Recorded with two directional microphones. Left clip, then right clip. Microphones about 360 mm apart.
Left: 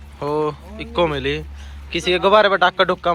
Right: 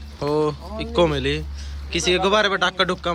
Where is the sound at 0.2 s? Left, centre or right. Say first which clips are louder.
Even; centre.